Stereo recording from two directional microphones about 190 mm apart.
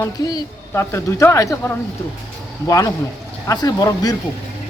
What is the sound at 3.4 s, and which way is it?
Speech, 20° left (ahead or behind).